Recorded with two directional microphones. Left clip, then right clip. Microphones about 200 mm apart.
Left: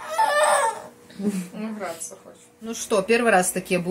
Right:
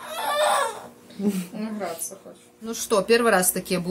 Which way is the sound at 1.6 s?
45° right (ahead or behind).